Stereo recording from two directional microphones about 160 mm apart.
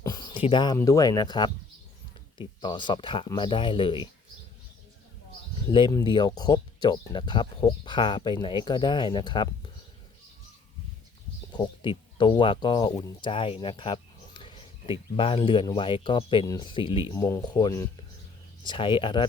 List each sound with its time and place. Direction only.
0.0 s a sound: 25° left (ahead or behind)
0.8 s speech: 20° left (ahead or behind)
5.7 s speech: 25° left (ahead or behind)
11.5 s speech: 30° left (ahead or behind)
17.2 s speech: 20° left (ahead or behind)